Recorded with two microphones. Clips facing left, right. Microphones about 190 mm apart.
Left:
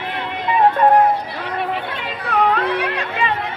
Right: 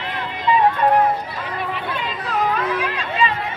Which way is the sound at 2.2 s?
60° left (ahead or behind).